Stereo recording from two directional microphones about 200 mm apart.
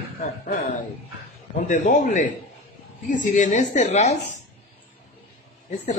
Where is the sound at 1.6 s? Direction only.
40° left (ahead or behind).